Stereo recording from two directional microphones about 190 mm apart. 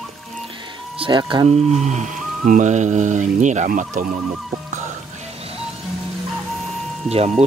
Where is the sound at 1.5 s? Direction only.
35° right (ahead or behind).